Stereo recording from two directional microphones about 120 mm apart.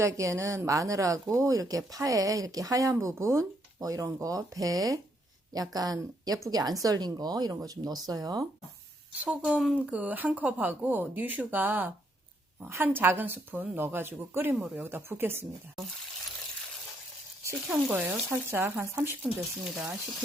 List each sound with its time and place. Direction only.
0.0 s speech: 25° right (ahead or behind)
9.2 s speech: 10° right (ahead or behind)
17.7 s speech: 10° right (ahead or behind)